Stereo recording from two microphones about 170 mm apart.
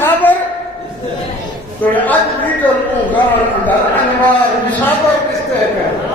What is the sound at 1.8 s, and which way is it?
A man's voice, 10° left (ahead or behind).